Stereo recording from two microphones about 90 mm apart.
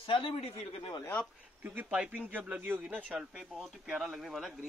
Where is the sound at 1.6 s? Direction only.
20° right (ahead or behind).